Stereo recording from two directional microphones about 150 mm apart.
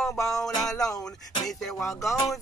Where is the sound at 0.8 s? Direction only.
25° left (ahead or behind).